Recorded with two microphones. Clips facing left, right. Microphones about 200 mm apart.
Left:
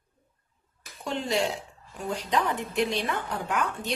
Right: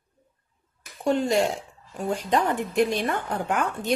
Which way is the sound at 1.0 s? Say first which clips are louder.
Right 6 dB; 45° right (ahead or behind).